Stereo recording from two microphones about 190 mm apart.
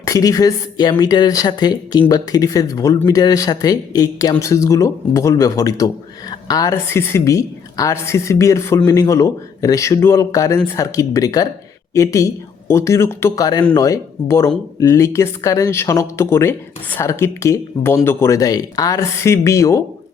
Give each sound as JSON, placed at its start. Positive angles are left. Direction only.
{"t": 0.0, "sound": "a woman's voice", "side_deg": 20}